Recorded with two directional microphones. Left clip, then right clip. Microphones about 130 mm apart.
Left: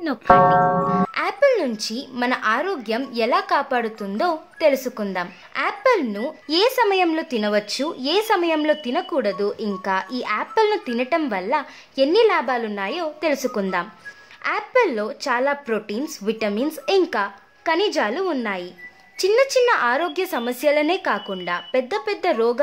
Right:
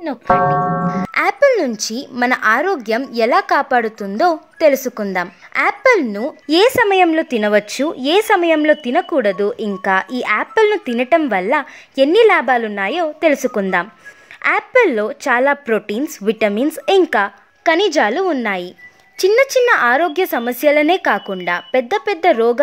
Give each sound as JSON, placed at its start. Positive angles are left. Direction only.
{"t": 0.3, "sound": "speech", "side_deg": 0}
{"t": 0.9, "sound": "a woman's voice", "side_deg": -60}